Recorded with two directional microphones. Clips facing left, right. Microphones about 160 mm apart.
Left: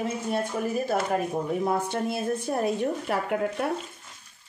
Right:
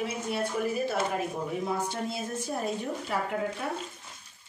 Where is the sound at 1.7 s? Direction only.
55° left (ahead or behind).